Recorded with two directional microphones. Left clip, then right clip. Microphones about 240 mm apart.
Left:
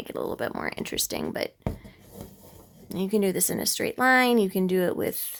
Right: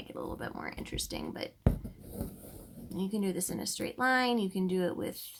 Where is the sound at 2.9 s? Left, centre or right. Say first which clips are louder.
Left 10 dB; left.